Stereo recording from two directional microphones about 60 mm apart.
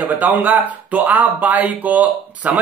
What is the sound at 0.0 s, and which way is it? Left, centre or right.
Speech, right.